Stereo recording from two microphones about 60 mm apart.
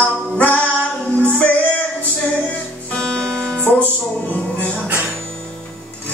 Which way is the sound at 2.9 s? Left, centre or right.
Centre.